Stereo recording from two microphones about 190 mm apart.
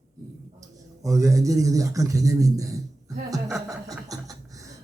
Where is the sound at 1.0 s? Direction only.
15° right (ahead or behind).